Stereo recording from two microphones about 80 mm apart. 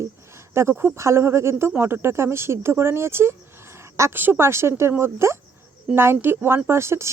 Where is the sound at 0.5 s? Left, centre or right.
Right.